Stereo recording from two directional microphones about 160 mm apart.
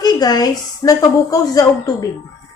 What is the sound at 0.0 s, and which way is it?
A woman's voice, 25° left (ahead or behind).